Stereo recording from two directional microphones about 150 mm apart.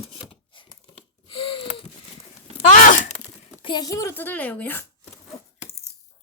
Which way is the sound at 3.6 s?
25° left (ahead or behind).